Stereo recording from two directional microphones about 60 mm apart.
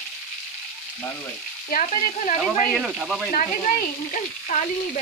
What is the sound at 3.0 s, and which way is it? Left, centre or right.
Speech, centre.